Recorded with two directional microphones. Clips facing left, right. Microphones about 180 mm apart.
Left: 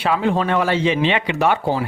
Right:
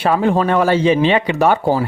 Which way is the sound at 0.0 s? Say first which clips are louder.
Right 4 dB; 45° right (ahead or behind).